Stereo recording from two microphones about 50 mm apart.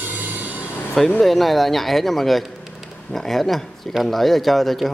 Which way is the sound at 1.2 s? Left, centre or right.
Centre.